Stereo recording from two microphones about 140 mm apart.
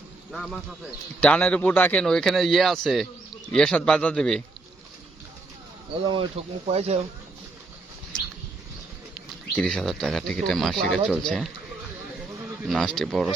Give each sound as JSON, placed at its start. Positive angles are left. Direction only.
{"t": 0.3, "sound": "speech", "side_deg": 0}
{"t": 5.9, "sound": "speech", "side_deg": -35}
{"t": 9.6, "sound": "speech", "side_deg": 5}
{"t": 12.6, "sound": "speech", "side_deg": 0}